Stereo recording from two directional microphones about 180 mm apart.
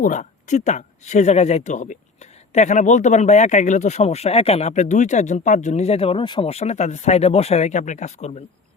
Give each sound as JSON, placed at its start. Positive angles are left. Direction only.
{"t": 0.0, "sound": "speech", "side_deg": 45}